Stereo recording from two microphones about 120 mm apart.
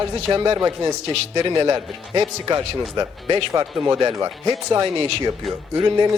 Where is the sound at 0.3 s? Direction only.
30° right (ahead or behind).